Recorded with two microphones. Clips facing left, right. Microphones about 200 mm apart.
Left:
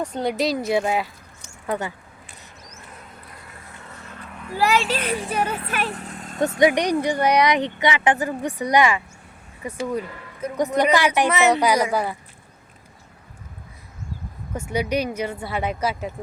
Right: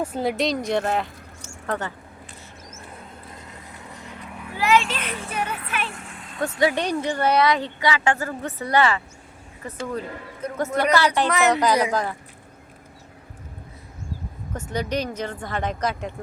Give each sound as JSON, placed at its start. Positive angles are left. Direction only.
{"t": 0.0, "sound": "speech", "side_deg": -5}
{"t": 3.3, "sound": "vehicle", "side_deg": -20}
{"t": 4.5, "sound": "speech", "side_deg": 40}
{"t": 6.6, "sound": "speech", "side_deg": 15}
{"t": 14.5, "sound": "speech", "side_deg": 10}